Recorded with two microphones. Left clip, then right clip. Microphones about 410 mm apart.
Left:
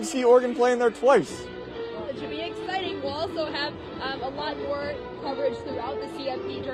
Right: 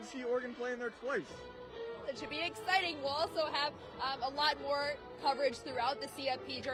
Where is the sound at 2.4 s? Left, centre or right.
Right.